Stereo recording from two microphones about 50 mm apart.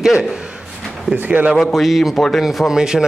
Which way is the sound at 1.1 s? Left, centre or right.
Right.